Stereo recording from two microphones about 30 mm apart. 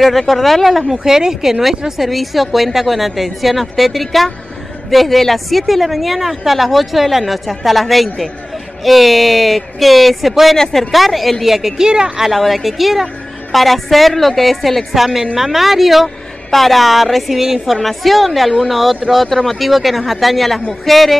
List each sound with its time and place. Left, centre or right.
0.0 s a woman's voice: centre
1.0 s speech: centre
1.9 s a woman's voice: centre
10.6 s speech: centre
10.9 s a woman's voice: centre
11.4 s speech: centre
12.3 s a woman's voice: centre
15.0 s a woman's voice: centre